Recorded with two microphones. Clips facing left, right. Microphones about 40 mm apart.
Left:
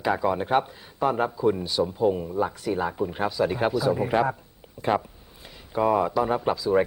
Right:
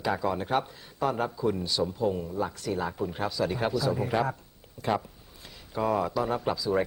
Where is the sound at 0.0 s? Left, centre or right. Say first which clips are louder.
Left 4 dB; centre.